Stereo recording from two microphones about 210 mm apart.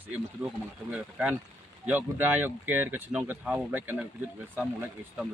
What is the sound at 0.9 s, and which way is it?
Speech, 5° right (ahead or behind).